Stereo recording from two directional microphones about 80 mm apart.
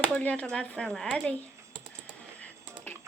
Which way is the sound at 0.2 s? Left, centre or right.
Centre.